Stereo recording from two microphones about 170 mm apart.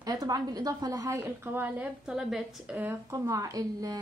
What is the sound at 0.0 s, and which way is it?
A woman's voice, 20° right (ahead or behind).